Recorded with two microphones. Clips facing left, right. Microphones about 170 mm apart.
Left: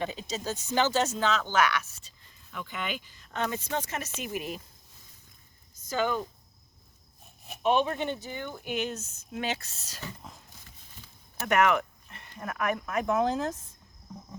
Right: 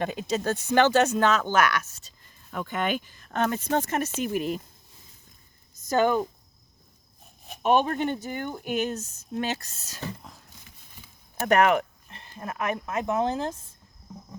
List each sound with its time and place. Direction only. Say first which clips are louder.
0.0 s speech: right 6 dB; 55° right (ahead or behind)
6.0 s speech: right 6 dB; 50° right (ahead or behind)
7.6 s speech: right 3 dB; 50° right (ahead or behind)
11.4 s speech: right 4 dB; 35° right (ahead or behind)
14.1 s cricket: right 1 dB; 5° right (ahead or behind)